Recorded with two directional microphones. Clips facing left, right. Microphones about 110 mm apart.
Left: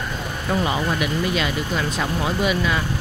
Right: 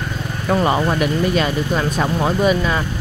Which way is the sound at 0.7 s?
45° right (ahead or behind).